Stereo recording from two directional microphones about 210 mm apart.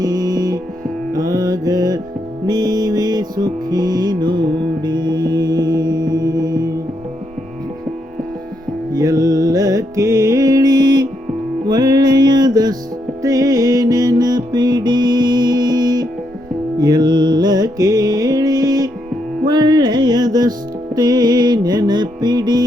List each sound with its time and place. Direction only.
0.0 s music: 15° right (ahead or behind)
8.9 s music: 15° right (ahead or behind)